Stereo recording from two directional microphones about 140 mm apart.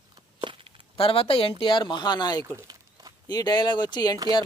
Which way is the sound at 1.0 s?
40° left (ahead or behind).